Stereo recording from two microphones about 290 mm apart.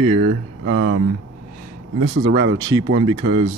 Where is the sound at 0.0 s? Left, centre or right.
Centre.